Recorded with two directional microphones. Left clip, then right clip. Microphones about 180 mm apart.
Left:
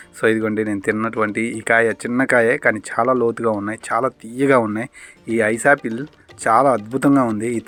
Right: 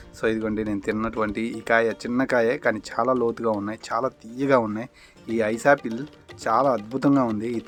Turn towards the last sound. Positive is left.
turn(degrees=25)  # may be behind; listen again after turning